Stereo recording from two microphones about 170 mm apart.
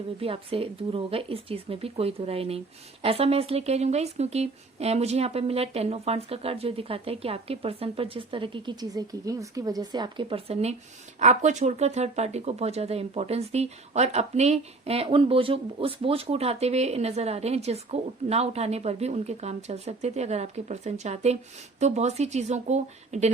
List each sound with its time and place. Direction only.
0.2 s speech: 35° right (ahead or behind)